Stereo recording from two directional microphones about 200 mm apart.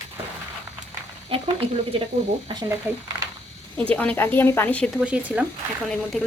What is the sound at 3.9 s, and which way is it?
Speech, 10° left (ahead or behind).